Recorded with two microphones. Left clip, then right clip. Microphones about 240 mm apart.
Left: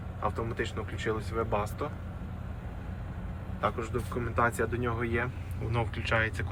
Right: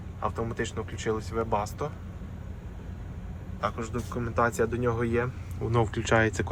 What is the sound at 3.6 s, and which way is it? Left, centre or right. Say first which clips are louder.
A man's voice: even; centre.